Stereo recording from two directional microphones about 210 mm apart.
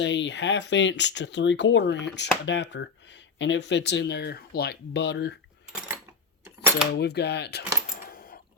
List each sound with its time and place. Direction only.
0.0 s speech: 60° left (ahead or behind)
6.4 s cutlery: 10° right (ahead or behind)
6.9 s speech: 55° left (ahead or behind)
8.1 s sewing machine: 45° left (ahead or behind)